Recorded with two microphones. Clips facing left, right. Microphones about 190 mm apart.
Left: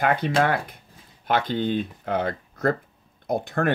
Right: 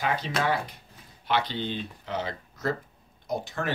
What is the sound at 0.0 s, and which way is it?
Speech, 55° left (ahead or behind).